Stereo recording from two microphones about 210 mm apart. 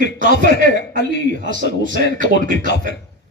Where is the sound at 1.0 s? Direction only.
55° left (ahead or behind).